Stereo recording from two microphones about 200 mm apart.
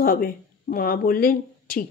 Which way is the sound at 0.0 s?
45° left (ahead or behind).